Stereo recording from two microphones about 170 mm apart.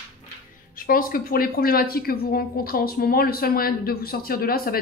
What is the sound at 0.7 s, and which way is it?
Speech, 55° left (ahead or behind).